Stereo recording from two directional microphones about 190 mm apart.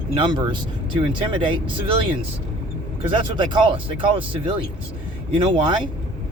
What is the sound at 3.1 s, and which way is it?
Speech, 25° right (ahead or behind).